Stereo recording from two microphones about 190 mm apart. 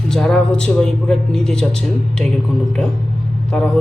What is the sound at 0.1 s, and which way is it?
A man's voice, 5° left (ahead or behind).